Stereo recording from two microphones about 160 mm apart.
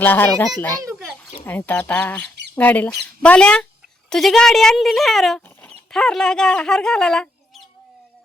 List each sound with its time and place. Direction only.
0.0 s speech: 10° left (ahead or behind)
0.9 s a sound: 15° right (ahead or behind)
1.5 s speech: 10° left (ahead or behind)